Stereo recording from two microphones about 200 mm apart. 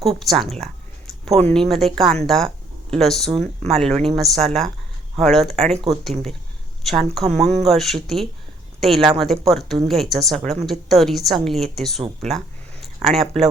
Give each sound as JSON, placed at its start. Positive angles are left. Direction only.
{"t": 0.2, "sound": "a woman's voice", "side_deg": 0}
{"t": 5.7, "sound": "speech", "side_deg": -25}
{"t": 6.8, "sound": "a woman's voice", "side_deg": 0}